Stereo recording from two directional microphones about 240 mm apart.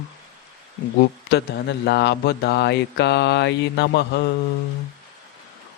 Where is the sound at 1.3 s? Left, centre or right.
Left.